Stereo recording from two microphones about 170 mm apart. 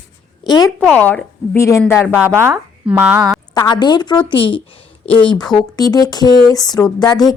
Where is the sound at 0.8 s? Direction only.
10° left (ahead or behind).